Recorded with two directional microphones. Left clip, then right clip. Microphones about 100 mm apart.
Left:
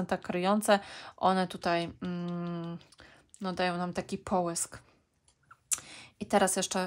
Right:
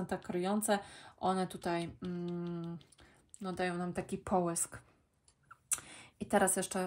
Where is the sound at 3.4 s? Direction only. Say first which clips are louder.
Left 6 dB; 60° left (ahead or behind); by 4.0 s 45° left (ahead or behind).